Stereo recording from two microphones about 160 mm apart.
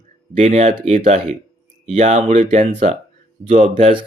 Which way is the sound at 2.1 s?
55° right (ahead or behind).